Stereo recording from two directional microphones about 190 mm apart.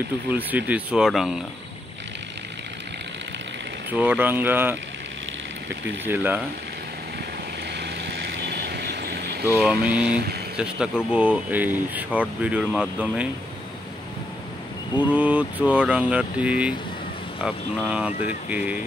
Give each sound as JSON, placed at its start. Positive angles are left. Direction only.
{"t": 0.3, "sound": "speech", "side_deg": -10}
{"t": 3.9, "sound": "speech", "side_deg": -10}
{"t": 6.0, "sound": "speech", "side_deg": -10}
{"t": 7.7, "sound": "vehicle", "side_deg": -60}
{"t": 9.7, "sound": "speech", "side_deg": -5}
{"t": 15.0, "sound": "speech", "side_deg": -5}